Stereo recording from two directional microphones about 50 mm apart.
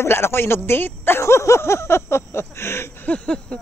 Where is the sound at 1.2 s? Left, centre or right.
Left.